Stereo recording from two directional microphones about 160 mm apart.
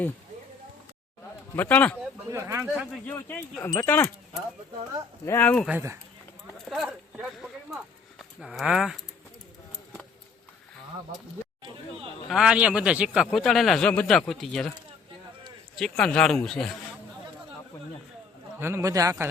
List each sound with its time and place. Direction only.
1.5 s speech: 10° left (ahead or behind)
2.0 s speech: 15° right (ahead or behind)
3.1 s speech: 10° left (ahead or behind)
5.2 s speech: 15° left (ahead or behind)
6.7 s speech: 5° right (ahead or behind)
8.4 s a man's voice: centre (ahead or behind)
12.3 s a man's voice: 5° right (ahead or behind)
15.7 s a man's voice: 5° left (ahead or behind)
18.6 s speech: 20° right (ahead or behind)